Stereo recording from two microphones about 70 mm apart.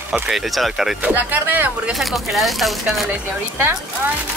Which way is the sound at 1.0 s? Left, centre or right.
Right.